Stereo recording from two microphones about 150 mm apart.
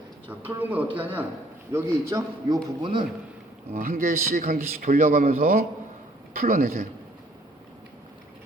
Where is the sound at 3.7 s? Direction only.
70° right (ahead or behind).